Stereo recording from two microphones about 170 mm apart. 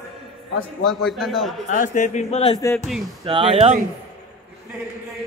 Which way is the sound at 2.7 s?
Centre (ahead or behind).